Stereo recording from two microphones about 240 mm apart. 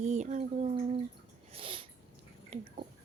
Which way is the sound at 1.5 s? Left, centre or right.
Right.